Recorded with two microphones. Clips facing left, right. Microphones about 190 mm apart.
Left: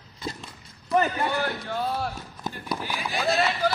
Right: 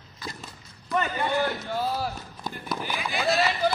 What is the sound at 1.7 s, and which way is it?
Speech, 5° right (ahead or behind).